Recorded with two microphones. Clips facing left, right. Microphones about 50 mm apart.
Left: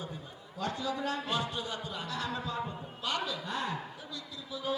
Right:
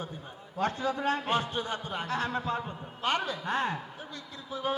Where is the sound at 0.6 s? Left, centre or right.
Right.